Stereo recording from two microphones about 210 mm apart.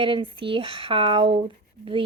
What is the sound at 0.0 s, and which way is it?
A woman's voice, 25° right (ahead or behind).